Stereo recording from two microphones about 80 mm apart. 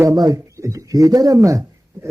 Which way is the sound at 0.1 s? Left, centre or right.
Right.